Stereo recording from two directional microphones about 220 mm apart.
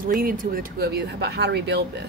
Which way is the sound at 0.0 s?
40° right (ahead or behind).